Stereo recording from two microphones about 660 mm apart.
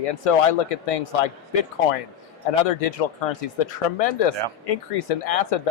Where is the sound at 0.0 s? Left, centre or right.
Left.